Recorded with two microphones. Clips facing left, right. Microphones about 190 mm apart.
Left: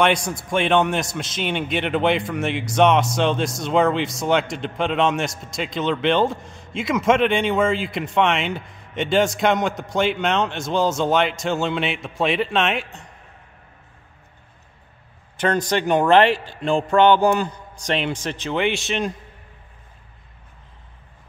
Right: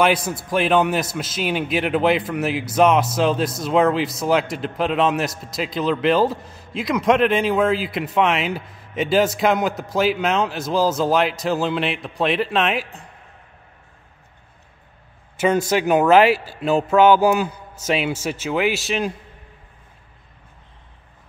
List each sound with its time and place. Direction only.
0.0 s a man's voice: 5° right (ahead or behind)
15.3 s a man's voice: 10° right (ahead or behind)